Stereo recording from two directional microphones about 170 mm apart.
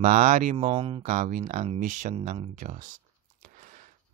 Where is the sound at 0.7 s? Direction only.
30° right (ahead or behind).